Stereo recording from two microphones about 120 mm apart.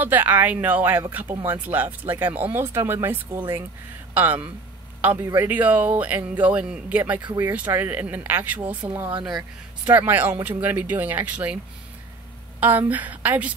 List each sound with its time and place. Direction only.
0.0 s speech: 15° right (ahead or behind)
12.5 s speech: 15° right (ahead or behind)